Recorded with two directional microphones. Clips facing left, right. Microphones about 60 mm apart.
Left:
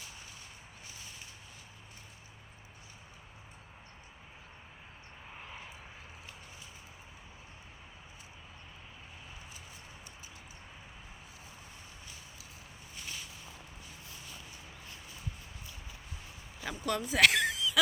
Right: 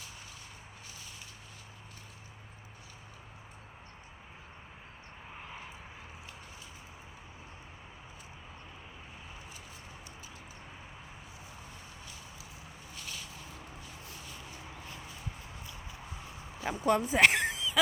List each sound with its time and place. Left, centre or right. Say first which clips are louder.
5.4 s vehicle: right 1 dB; centre
16.6 s speech: right 6 dB; right
17.1 s a sound: left 3 dB; right